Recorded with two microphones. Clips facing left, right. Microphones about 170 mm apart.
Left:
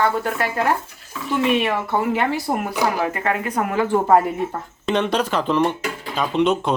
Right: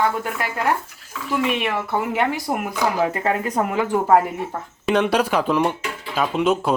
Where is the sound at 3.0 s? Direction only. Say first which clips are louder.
Right 1 dB; 25° right (ahead or behind).